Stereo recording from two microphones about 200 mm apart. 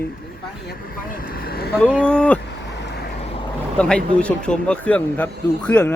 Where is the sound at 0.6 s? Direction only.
45° left (ahead or behind).